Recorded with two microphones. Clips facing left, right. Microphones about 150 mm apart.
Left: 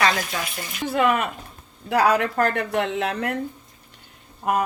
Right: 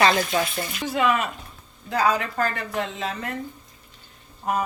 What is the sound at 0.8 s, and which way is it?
Speech, 50° left (ahead or behind).